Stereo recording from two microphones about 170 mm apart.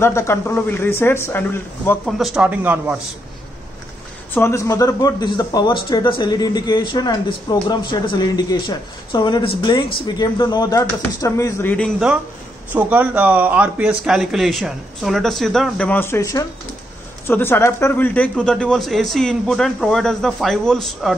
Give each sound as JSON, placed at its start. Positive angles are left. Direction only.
{"t": 0.0, "sound": "speech", "side_deg": 15}
{"t": 2.0, "sound": "speech", "side_deg": 0}
{"t": 4.3, "sound": "speech", "side_deg": 15}
{"t": 12.7, "sound": "speech", "side_deg": -10}